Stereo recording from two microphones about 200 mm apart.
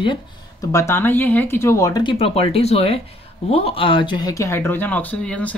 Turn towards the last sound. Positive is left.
turn(degrees=5)  # may be behind; listen again after turning